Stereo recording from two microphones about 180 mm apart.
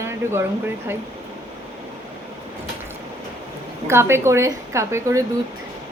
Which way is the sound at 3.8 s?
15° right (ahead or behind).